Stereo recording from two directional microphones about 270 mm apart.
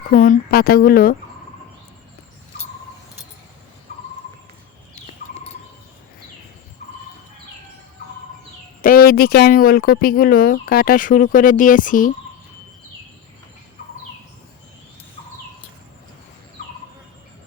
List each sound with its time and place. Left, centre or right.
0.1 s speech: left
8.8 s speech: left